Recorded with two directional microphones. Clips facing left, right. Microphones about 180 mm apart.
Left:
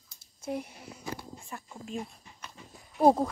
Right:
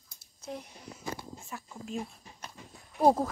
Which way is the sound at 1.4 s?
Centre (ahead or behind).